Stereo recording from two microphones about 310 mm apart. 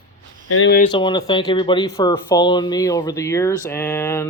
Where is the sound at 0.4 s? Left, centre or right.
Left.